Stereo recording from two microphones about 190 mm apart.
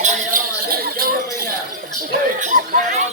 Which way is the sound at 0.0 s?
45° right (ahead or behind).